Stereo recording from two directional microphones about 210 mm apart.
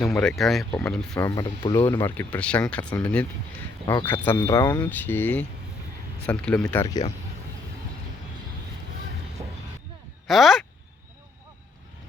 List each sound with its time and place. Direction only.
0.0 s speech: 5° left (ahead or behind)
1.1 s speech: 20° left (ahead or behind)
10.2 s speech: centre (ahead or behind)